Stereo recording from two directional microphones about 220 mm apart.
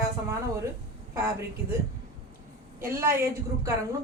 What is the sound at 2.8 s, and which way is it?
Speech, 10° right (ahead or behind).